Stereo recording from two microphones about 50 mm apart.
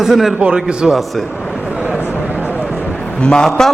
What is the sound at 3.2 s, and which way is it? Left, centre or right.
Speech, centre.